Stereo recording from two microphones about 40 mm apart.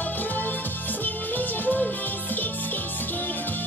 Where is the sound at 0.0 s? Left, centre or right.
Left.